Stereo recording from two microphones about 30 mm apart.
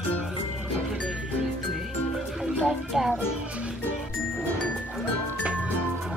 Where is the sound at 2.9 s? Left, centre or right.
Centre.